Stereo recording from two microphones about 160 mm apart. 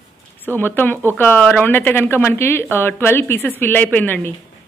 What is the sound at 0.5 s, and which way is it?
Speech, 10° left (ahead or behind).